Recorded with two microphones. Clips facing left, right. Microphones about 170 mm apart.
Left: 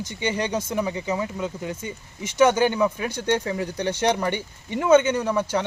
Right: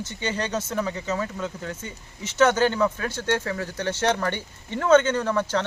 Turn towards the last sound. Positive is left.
turn(degrees=10)  # may be behind; listen again after turning